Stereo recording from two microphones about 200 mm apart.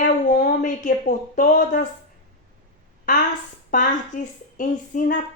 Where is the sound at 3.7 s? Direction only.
40° left (ahead or behind).